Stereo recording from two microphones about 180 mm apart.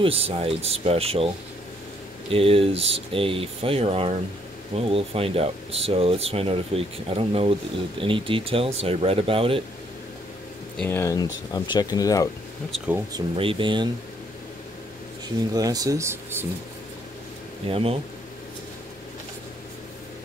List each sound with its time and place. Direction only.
0.0 s speech: 30° right (ahead or behind)
2.3 s speech: 30° right (ahead or behind)
10.8 s speech: 15° left (ahead or behind)
12.7 s speech: 5° right (ahead or behind)
13.1 s speech: 30° right (ahead or behind)
15.5 s speech: 20° right (ahead or behind)
17.6 s speech: 30° right (ahead or behind)